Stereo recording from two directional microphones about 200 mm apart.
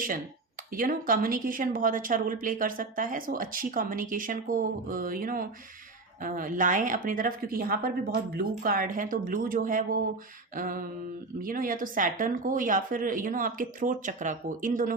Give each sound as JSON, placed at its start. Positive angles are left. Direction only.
{"t": 0.7, "sound": "a woman's voice", "side_deg": -45}